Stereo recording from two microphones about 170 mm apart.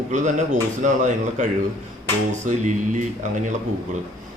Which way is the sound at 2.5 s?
45° right (ahead or behind).